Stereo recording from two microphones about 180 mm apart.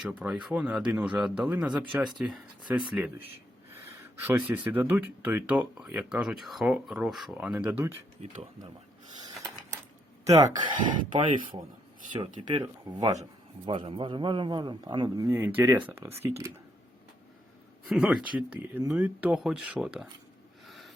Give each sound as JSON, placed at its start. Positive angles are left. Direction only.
{"t": 0.0, "sound": "speech", "side_deg": -5}
{"t": 10.2, "sound": "a man's voice", "side_deg": -20}
{"t": 12.6, "sound": "a man's voice", "side_deg": -25}
{"t": 17.8, "sound": "speech", "side_deg": -5}
{"t": 20.7, "sound": "snort", "side_deg": 0}